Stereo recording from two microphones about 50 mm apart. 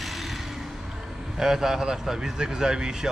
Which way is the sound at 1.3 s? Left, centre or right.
Centre.